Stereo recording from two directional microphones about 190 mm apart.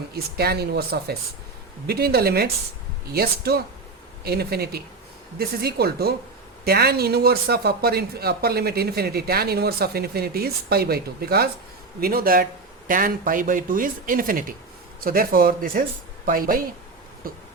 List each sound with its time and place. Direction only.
0.1 s speech: 55° right (ahead or behind)